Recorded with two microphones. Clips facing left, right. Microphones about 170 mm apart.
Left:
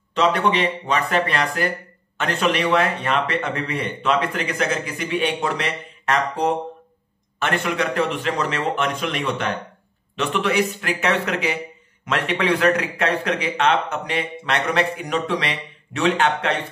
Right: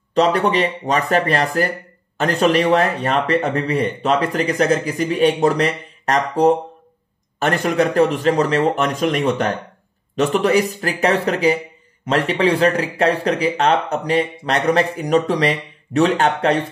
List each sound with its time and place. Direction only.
0.1 s speech: 40° right (ahead or behind)